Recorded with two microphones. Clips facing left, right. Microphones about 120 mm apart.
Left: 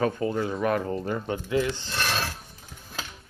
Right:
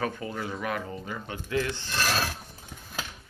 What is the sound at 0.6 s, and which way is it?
Speech, 45° left (ahead or behind).